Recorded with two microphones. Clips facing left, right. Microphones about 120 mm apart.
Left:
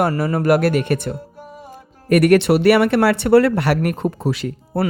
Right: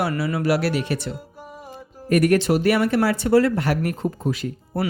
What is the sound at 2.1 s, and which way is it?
Speech, 70° left (ahead or behind).